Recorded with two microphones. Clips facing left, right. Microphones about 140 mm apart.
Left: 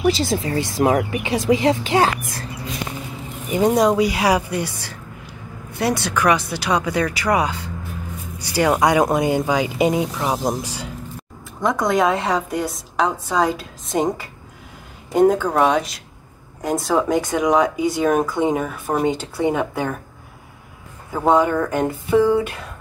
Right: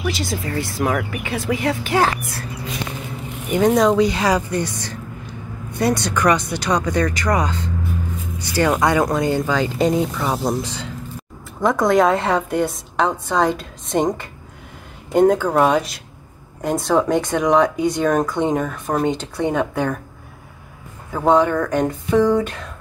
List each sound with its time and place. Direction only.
0.0 s speech: 25° left (ahead or behind)
3.5 s speech: 10° left (ahead or behind)
11.6 s speech: centre (ahead or behind)
21.1 s speech: 5° left (ahead or behind)